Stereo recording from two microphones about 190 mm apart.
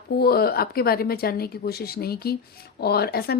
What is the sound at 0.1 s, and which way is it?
Speech, 55° left (ahead or behind).